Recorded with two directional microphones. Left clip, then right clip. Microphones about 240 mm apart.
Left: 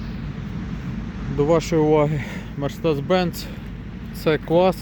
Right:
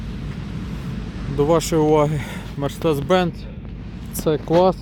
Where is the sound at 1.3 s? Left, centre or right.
Centre.